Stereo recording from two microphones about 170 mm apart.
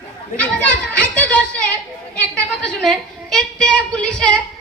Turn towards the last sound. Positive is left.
turn(degrees=5)  # may be behind; listen again after turning